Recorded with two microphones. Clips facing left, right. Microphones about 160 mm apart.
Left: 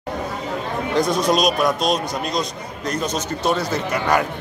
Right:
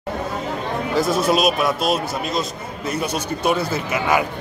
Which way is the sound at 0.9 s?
5° right (ahead or behind).